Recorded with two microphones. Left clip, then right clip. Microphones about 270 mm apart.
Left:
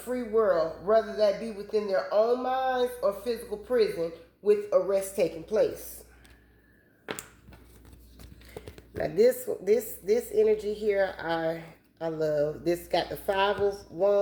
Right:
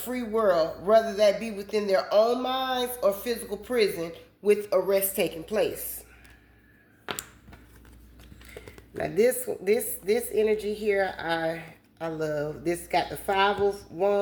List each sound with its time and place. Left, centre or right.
0.1 s a man's voice: right
9.0 s a woman's voice: right